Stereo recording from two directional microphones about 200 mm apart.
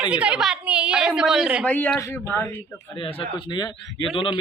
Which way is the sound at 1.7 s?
10° left (ahead or behind).